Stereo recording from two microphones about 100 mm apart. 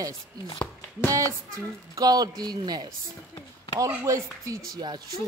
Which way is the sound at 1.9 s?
40° right (ahead or behind).